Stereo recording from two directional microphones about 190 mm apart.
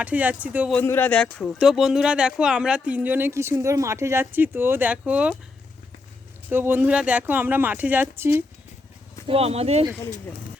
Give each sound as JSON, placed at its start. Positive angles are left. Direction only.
{"t": 0.0, "sound": "speech", "side_deg": -10}
{"t": 0.7, "sound": "speech", "side_deg": 10}
{"t": 6.5, "sound": "speech", "side_deg": -10}
{"t": 9.2, "sound": "speech", "side_deg": -30}